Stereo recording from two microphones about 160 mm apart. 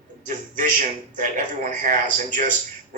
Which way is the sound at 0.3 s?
50° right (ahead or behind).